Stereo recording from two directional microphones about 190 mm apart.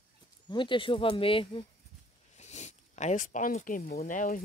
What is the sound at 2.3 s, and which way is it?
Snake, 35° left (ahead or behind).